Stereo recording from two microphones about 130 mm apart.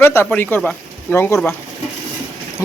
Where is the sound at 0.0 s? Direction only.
20° left (ahead or behind).